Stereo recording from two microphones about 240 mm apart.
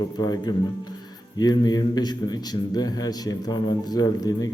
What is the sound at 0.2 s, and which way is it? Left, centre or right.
A man's voice, centre.